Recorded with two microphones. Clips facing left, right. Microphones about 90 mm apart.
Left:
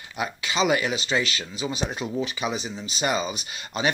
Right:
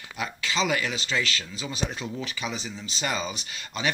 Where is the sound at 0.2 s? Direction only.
15° left (ahead or behind).